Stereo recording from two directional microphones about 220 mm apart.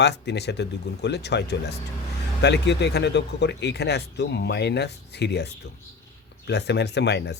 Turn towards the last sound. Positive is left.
turn(degrees=50)  # may be behind; listen again after turning